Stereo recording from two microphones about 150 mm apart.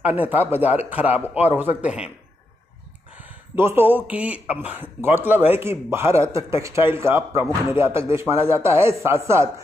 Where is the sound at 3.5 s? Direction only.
15° right (ahead or behind).